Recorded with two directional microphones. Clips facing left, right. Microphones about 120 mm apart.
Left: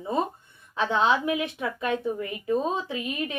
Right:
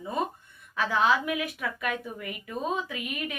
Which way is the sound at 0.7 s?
25° left (ahead or behind).